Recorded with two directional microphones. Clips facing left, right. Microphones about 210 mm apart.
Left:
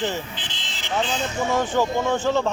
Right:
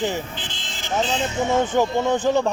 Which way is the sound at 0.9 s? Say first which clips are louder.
Right 2 dB; 20° right (ahead or behind).